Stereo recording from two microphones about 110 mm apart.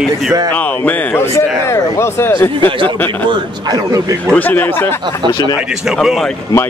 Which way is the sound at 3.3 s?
35° right (ahead or behind).